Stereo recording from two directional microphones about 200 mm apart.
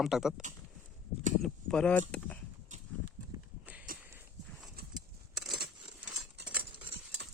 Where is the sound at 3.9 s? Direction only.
45° right (ahead or behind).